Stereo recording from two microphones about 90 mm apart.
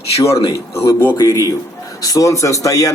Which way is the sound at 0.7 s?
30° left (ahead or behind).